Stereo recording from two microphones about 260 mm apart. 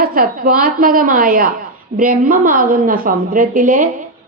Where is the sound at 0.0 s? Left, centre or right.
Right.